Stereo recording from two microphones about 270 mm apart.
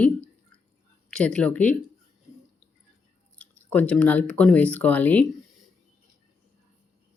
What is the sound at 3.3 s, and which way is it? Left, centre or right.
Speech, centre.